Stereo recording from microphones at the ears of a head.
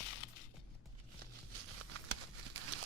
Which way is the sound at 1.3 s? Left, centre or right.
Right.